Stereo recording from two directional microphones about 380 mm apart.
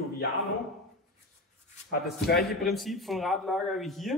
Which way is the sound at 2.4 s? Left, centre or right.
Centre.